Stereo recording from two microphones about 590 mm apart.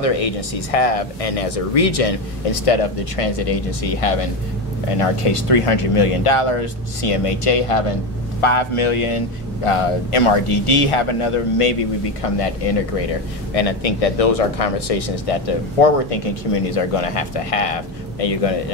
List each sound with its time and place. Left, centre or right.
0.0 s speech: left